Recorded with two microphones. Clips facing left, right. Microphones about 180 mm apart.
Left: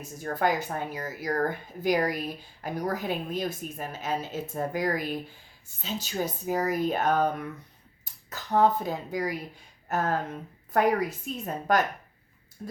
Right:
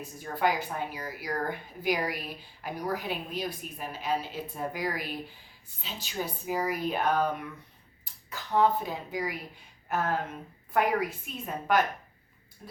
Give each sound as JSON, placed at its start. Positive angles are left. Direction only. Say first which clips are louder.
{"t": 0.0, "sound": "a woman's voice", "louder": "left 2 dB", "side_deg": 45}
{"t": 8.3, "sound": "a woman's voice", "louder": "left 2 dB", "side_deg": 40}